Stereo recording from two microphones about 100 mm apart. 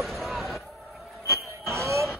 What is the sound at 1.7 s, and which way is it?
Music, 30° right (ahead or behind).